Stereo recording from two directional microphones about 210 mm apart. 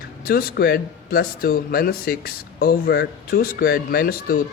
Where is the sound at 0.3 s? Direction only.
45° left (ahead or behind).